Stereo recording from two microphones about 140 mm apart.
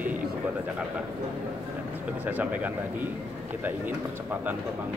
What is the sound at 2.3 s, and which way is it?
Speech, 10° right (ahead or behind).